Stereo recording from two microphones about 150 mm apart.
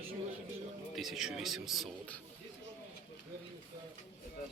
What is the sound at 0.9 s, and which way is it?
Speech, centre (ahead or behind).